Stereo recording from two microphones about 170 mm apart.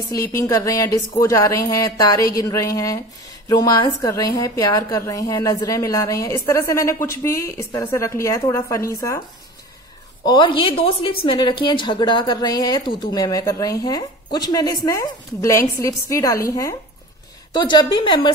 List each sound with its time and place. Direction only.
0.3 s a woman's voice: 20° left (ahead or behind)
7.7 s a woman's voice: 25° left (ahead or behind)
10.2 s a woman's voice: 25° left (ahead or behind)